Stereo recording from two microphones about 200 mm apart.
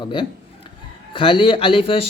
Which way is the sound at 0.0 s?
25° left (ahead or behind).